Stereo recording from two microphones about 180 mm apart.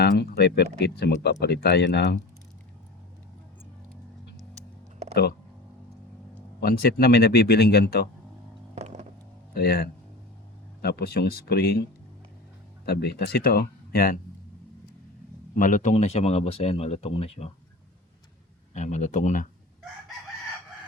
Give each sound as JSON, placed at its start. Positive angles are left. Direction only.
{"t": 0.0, "sound": "speech", "side_deg": 60}
{"t": 6.6, "sound": "speech", "side_deg": 55}
{"t": 8.7, "sound": "vehicle", "side_deg": -40}
{"t": 9.5, "sound": "speech", "side_deg": 60}
{"t": 12.8, "sound": "speech", "side_deg": 65}
{"t": 15.5, "sound": "speech", "side_deg": 45}
{"t": 18.7, "sound": "speech", "side_deg": 40}